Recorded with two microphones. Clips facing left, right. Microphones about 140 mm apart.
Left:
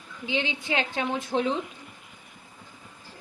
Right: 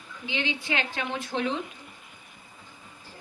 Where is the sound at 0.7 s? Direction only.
40° left (ahead or behind).